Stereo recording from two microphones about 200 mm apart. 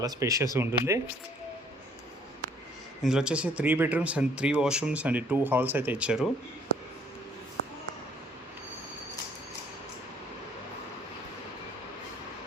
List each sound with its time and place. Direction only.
0.0 s speech: 15° right (ahead or behind)
3.0 s speech: 5° right (ahead or behind)